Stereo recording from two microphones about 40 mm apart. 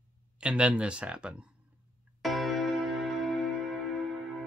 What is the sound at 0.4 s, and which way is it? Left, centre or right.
Speech, right.